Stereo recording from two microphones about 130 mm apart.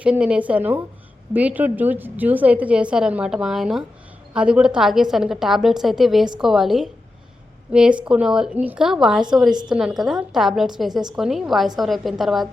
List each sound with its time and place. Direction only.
0.0 s a woman's voice: 10° right (ahead or behind)